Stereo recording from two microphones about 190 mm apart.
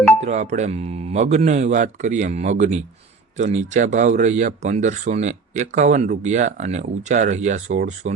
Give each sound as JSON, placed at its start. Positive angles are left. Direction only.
{"t": 0.2, "sound": "speech", "side_deg": -35}